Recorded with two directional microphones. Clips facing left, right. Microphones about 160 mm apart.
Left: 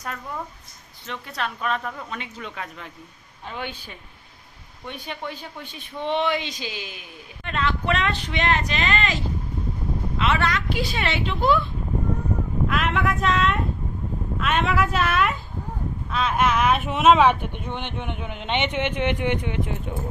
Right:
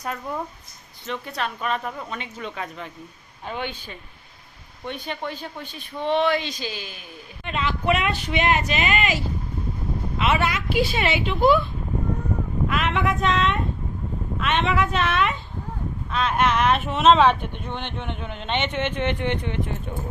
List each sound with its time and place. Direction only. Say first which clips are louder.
1.0 s a woman's voice: right 2 dB; centre (ahead or behind)
5.3 s speech: right 2 dB; 10° left (ahead or behind)
7.4 s speech: right 1 dB; 5° right (ahead or behind)
12.6 s a woman's voice: even; centre (ahead or behind); by 19.9 s 15° left (ahead or behind)